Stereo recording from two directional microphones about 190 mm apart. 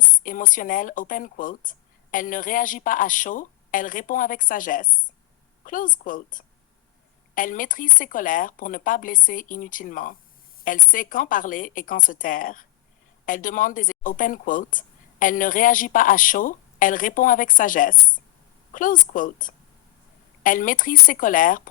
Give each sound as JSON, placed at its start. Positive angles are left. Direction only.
{"t": 0.2, "sound": "speech", "side_deg": 45}